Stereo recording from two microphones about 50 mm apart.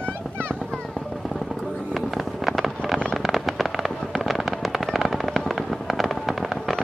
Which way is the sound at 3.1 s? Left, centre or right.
Centre.